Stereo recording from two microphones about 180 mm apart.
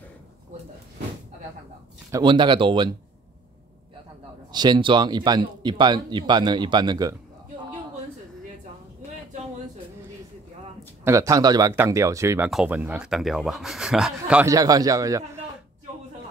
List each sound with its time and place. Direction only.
2.0 s speech: 20° right (ahead or behind)
4.5 s speech: 25° right (ahead or behind)
11.1 s speech: 15° right (ahead or behind)
12.4 s speech: 5° right (ahead or behind)
14.5 s speech: 20° right (ahead or behind)